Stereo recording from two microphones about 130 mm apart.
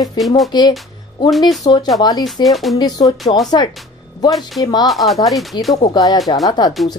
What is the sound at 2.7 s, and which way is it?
Speech, 25° left (ahead or behind).